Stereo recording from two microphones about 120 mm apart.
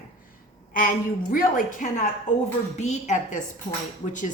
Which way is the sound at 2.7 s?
70° left (ahead or behind).